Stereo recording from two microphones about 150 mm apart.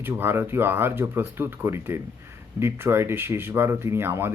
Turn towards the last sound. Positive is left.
turn(degrees=-15)  # may be behind; listen again after turning